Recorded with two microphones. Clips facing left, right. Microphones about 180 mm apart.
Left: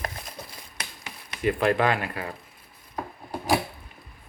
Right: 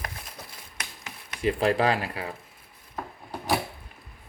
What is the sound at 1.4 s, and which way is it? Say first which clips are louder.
Speech: left 1 dB; 30° right (ahead or behind).